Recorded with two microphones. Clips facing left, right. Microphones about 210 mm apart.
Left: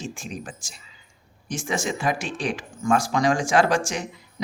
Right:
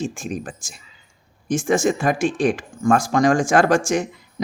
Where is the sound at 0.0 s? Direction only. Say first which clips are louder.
Right 7 dB; 50° right (ahead or behind).